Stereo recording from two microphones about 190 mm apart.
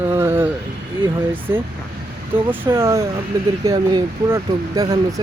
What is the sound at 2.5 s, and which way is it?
Speech, 15° right (ahead or behind).